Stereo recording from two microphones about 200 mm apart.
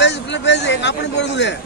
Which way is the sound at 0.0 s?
60° left (ahead or behind).